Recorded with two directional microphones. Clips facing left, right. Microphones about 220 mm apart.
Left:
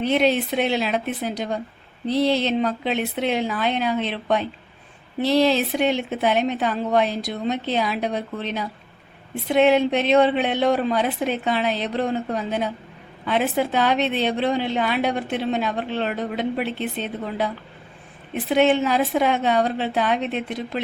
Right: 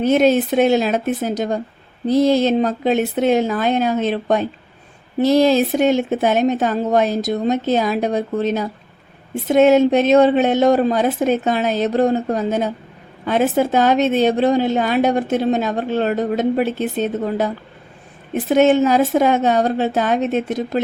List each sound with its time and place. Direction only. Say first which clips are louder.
0.0 s a woman's voice: right 6 dB; 45° right (ahead or behind)